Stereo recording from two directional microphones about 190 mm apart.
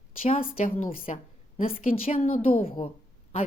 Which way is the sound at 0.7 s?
30° left (ahead or behind).